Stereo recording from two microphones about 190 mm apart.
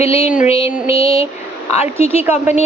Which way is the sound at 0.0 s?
30° left (ahead or behind).